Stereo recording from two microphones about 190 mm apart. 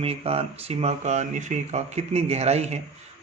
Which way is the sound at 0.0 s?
30° right (ahead or behind).